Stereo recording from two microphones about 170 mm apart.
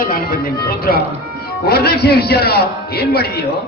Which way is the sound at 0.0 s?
60° left (ahead or behind).